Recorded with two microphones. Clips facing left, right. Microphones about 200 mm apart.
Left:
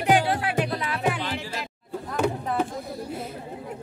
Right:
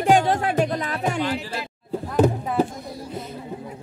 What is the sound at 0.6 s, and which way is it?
Music, 40° right (ahead or behind).